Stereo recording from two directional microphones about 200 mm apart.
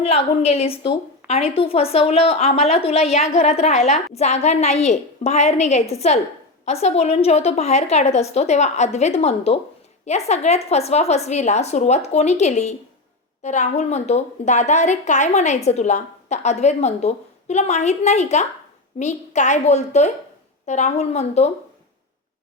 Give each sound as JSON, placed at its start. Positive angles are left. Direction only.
{"t": 0.0, "sound": "a woman's voice", "side_deg": 30}